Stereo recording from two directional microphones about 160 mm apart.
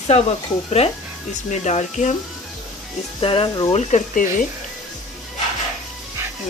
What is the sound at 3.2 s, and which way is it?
Speech, 35° left (ahead or behind).